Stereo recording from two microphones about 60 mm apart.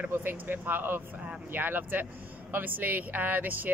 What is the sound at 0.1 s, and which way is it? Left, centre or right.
Speech, right.